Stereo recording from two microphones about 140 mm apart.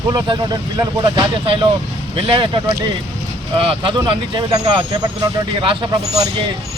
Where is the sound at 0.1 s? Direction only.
30° right (ahead or behind).